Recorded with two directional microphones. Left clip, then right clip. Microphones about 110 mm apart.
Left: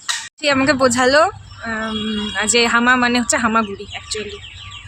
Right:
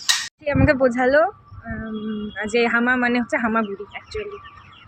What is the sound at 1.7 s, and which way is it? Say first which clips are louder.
Speech: left 8 dB; 45° left (ahead or behind).